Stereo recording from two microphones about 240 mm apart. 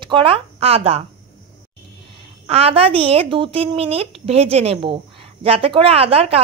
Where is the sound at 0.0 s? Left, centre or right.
Right.